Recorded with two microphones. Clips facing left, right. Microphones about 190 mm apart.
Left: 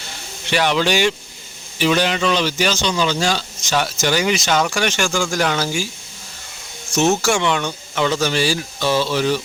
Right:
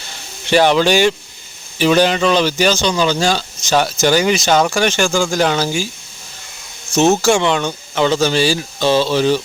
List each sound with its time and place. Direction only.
0.5 s speech: 35° right (ahead or behind)
6.9 s speech: 30° right (ahead or behind)